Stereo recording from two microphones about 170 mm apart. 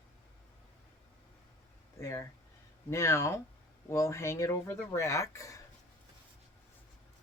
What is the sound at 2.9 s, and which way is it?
Speech, 15° left (ahead or behind).